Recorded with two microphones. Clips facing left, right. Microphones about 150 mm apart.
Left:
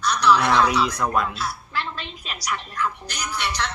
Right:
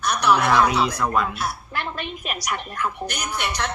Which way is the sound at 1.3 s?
55° right (ahead or behind).